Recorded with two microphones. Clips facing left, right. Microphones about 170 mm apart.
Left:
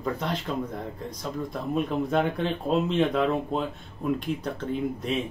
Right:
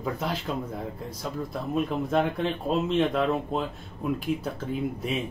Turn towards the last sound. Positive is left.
turn(degrees=-5)  # may be behind; listen again after turning